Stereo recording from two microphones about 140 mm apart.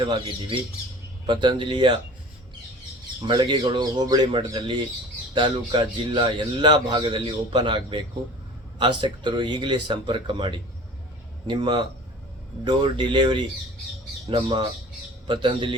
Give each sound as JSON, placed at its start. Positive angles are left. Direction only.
{"t": 0.0, "sound": "a man's voice", "side_deg": -35}
{"t": 3.2, "sound": "a man's voice", "side_deg": -30}